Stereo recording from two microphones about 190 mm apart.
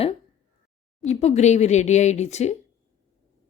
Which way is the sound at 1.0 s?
35° left (ahead or behind).